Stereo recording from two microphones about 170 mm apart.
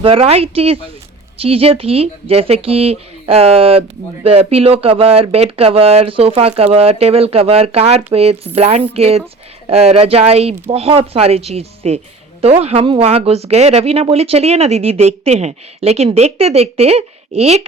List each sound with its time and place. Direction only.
0.0 s speech: 35° right (ahead or behind)